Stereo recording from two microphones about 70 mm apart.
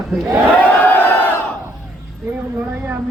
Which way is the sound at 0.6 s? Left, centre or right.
Left.